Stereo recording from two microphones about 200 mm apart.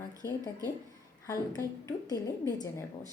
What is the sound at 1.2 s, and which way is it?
A woman's voice, 20° left (ahead or behind).